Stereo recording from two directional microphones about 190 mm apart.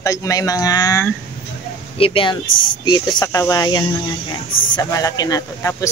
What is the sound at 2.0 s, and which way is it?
Speech, 30° left (ahead or behind).